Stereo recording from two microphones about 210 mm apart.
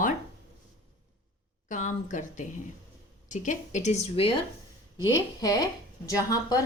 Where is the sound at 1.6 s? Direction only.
35° left (ahead or behind).